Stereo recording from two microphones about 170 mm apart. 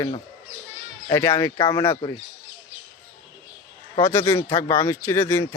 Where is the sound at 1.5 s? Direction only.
30° left (ahead or behind).